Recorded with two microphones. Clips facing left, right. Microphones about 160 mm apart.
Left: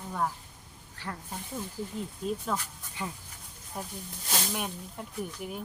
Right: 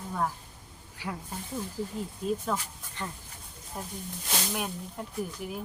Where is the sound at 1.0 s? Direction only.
10° right (ahead or behind).